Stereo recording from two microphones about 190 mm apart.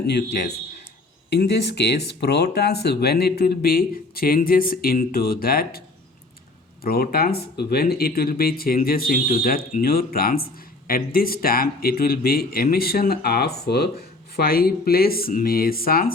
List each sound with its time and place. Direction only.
0.1 s speech: 60° left (ahead or behind)
6.8 s speech: 55° left (ahead or behind)